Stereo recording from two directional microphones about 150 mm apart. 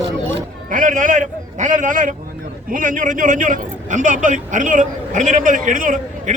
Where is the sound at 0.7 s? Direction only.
60° right (ahead or behind).